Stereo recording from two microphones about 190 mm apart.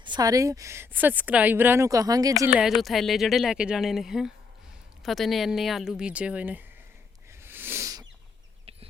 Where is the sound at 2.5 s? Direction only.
Centre (ahead or behind).